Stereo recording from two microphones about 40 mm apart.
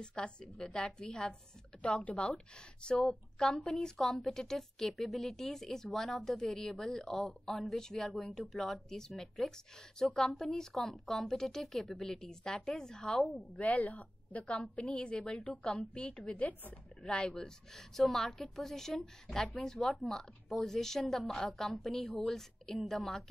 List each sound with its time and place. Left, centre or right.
0.0 s a woman's voice: left
1.8 s a woman's voice: left
13.4 s a woman's voice: left
14.9 s a woman's voice: left
17.0 s a woman's voice: left
17.7 s a woman's voice: centre